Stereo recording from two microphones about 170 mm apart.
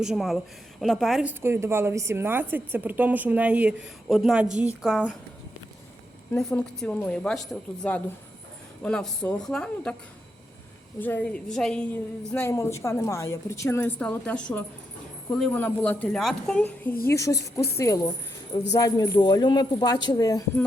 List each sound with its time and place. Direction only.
0.0 s a woman's voice: centre (ahead or behind)
6.3 s a woman's voice: 5° left (ahead or behind)
11.0 s a woman's voice: 10° left (ahead or behind)
12.3 s a woman's voice: 15° left (ahead or behind)